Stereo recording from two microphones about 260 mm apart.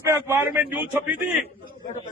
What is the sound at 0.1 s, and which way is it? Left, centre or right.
Speech, centre.